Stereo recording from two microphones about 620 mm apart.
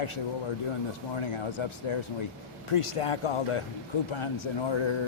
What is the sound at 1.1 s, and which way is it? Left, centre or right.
A man's voice, left.